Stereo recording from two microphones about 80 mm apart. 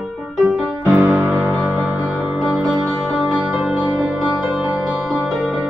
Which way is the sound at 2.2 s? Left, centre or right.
Centre.